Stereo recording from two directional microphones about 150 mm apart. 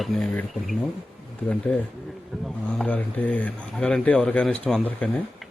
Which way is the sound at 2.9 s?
10° left (ahead or behind).